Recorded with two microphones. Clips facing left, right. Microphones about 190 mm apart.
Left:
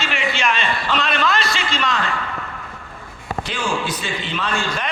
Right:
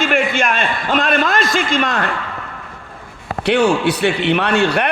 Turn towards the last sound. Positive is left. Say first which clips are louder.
# right 8 dB
turn(degrees=-65)  # may be behind; listen again after turning